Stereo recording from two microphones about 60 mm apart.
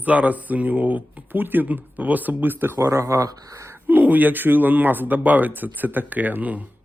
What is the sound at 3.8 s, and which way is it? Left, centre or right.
Speech, right.